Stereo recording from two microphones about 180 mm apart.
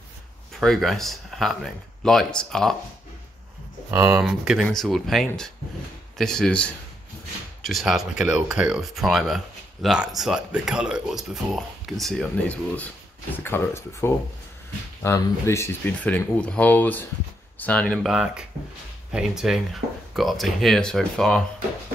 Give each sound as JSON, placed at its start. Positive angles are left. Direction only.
{"t": 0.6, "sound": "speech", "side_deg": 0}
{"t": 3.9, "sound": "speech", "side_deg": -15}
{"t": 4.2, "sound": "speech", "side_deg": -5}